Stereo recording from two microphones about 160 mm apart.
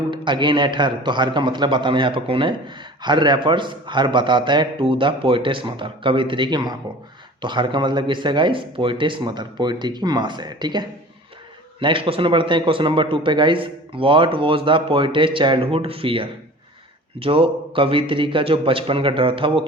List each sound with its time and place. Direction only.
0.1 s a man's voice: 30° right (ahead or behind)